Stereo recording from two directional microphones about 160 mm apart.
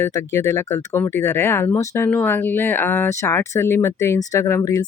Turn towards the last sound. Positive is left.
turn(degrees=20)  # may be behind; listen again after turning